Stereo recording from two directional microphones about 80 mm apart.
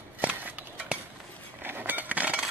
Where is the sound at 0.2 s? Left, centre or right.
Centre.